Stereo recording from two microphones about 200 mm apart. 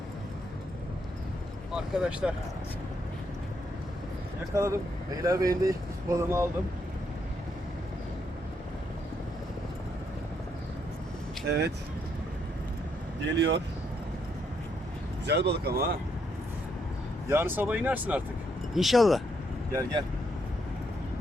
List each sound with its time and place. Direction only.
1.7 s speech: 5° right (ahead or behind)
4.5 s speech: 15° right (ahead or behind)
11.4 s speech: 55° right (ahead or behind)
13.2 s speech: 60° right (ahead or behind)
15.3 s speech: 55° right (ahead or behind)
17.2 s speech: 10° right (ahead or behind)
19.7 s speech: 20° right (ahead or behind)